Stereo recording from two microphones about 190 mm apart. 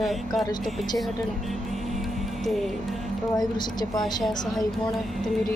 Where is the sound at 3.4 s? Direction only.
20° left (ahead or behind).